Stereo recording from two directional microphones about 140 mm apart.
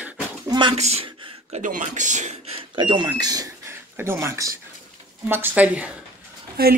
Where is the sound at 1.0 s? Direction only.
35° right (ahead or behind).